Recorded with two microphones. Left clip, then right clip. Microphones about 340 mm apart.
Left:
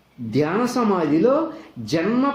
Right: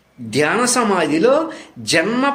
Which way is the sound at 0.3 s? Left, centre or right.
Right.